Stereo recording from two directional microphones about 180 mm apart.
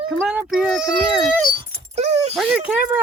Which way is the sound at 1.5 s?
30° right (ahead or behind).